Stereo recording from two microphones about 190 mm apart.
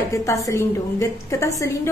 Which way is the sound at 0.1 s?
15° left (ahead or behind).